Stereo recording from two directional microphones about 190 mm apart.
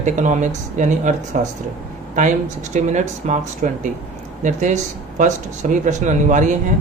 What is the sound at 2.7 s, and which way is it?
A man's voice, 40° right (ahead or behind).